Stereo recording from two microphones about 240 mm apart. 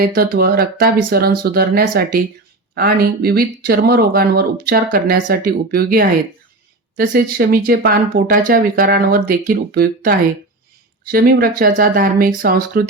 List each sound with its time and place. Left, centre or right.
0.0 s speech: right